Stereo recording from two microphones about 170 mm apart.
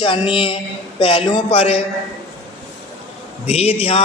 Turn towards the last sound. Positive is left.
turn(degrees=35)  # may be behind; listen again after turning